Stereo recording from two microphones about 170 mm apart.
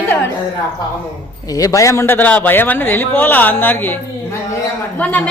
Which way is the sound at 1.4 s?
20° left (ahead or behind).